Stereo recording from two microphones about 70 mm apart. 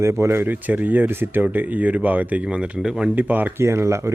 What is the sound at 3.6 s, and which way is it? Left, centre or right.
Speech, right.